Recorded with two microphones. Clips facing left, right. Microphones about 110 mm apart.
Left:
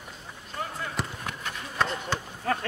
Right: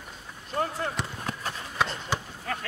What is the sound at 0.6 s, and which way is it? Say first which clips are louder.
Basketball bounce: right 6 dB; 50° right (ahead or behind).